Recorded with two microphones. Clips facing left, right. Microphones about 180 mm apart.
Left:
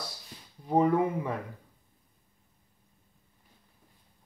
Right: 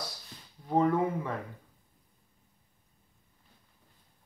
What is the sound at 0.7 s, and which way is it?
Speech, 15° left (ahead or behind).